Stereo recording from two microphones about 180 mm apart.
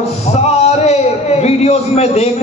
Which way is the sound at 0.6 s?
35° left (ahead or behind).